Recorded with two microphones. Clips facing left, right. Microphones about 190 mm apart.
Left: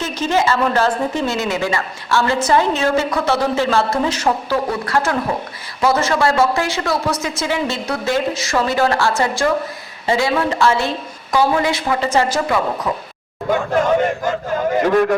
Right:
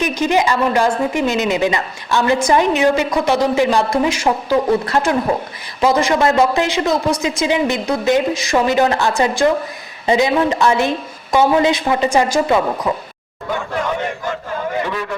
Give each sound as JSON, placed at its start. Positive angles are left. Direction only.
{"t": 0.0, "sound": "a woman's voice", "side_deg": -15}
{"t": 14.8, "sound": "a man's voice", "side_deg": 45}